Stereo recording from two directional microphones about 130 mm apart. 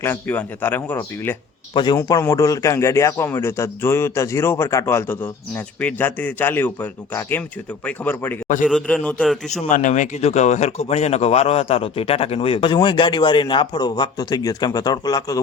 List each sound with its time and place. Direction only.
0.0 s speech: 15° left (ahead or behind)
1.7 s speech: 35° left (ahead or behind); by 8.4 s 15° left (ahead or behind)
8.6 s a man's voice: 5° left (ahead or behind)
9.6 s speech: 80° left; by 15.4 s 30° left (ahead or behind)